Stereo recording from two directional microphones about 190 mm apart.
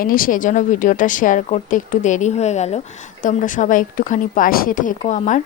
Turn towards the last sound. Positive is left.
turn(degrees=40)  # may be behind; listen again after turning